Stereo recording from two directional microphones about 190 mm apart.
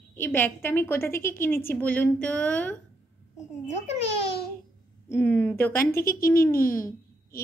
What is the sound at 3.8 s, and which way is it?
Speech, 35° left (ahead or behind).